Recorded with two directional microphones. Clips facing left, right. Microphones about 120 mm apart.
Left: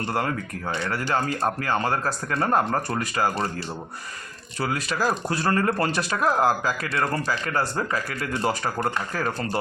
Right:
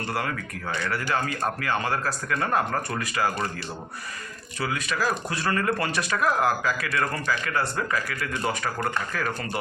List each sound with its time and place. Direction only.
0.1 s speech: 30° left (ahead or behind)
4.6 s speech: 35° left (ahead or behind)